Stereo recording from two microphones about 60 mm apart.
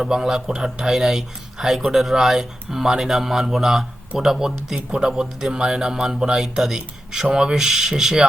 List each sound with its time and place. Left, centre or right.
0.0 s speech: centre